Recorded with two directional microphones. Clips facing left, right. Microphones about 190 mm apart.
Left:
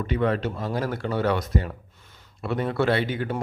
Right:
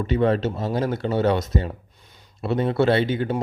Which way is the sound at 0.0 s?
30° right (ahead or behind).